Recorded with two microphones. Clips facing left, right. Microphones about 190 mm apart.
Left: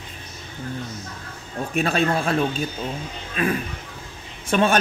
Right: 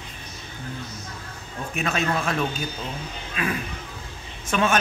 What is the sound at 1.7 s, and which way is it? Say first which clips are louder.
Speech: left 4 dB; 35° left (ahead or behind).